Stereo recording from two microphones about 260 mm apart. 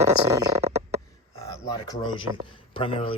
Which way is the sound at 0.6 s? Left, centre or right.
Right.